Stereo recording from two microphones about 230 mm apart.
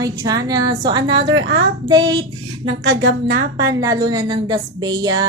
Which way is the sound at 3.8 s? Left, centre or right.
Centre.